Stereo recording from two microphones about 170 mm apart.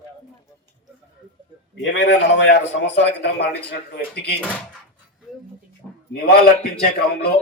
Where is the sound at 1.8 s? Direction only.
90° left; by 4.3 s 70° left (ahead or behind).